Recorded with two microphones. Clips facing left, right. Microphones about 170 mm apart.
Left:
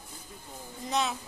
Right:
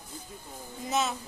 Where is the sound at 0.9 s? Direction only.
Centre (ahead or behind).